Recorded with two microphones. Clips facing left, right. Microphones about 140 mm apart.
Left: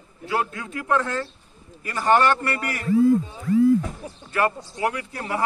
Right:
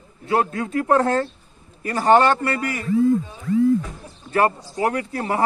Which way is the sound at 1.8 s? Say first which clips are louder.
Right 4 dB; 30° right (ahead or behind).